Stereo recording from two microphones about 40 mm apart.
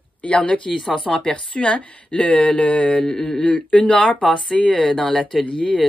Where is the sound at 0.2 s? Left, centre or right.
Left.